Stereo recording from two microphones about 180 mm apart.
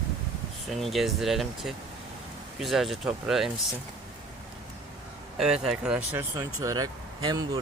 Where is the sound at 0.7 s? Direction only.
Centre (ahead or behind).